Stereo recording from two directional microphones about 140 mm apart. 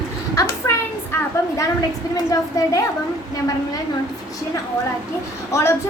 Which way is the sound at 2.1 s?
25° left (ahead or behind).